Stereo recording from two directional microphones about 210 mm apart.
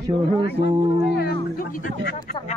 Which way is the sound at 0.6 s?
50° left (ahead or behind).